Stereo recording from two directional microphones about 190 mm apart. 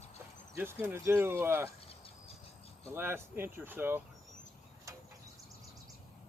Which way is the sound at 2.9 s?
10° right (ahead or behind).